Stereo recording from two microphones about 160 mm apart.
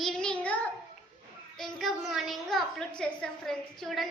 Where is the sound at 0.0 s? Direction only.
Centre (ahead or behind).